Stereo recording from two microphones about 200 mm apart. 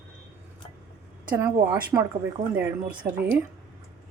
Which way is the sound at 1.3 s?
10° right (ahead or behind).